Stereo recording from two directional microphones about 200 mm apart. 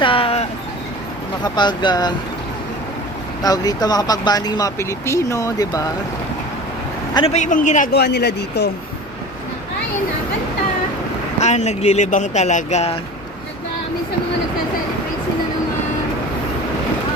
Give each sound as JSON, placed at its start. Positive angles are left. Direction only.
{"t": 0.0, "sound": "a sound", "side_deg": 25}
{"t": 1.5, "sound": "speech", "side_deg": 20}
{"t": 3.4, "sound": "speech", "side_deg": 20}
{"t": 7.1, "sound": "a man's voice", "side_deg": 20}
{"t": 7.3, "sound": "speech", "side_deg": 40}
{"t": 7.9, "sound": "speech", "side_deg": 55}
{"t": 11.3, "sound": "speech", "side_deg": 35}